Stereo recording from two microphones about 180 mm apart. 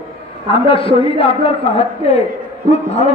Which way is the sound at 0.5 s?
30° left (ahead or behind).